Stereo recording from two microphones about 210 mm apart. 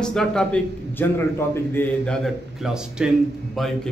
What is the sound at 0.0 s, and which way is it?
A man's voice, 5° left (ahead or behind).